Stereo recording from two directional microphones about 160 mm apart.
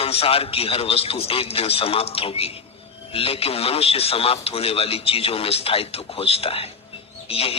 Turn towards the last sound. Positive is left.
turn(degrees=35)  # may be behind; listen again after turning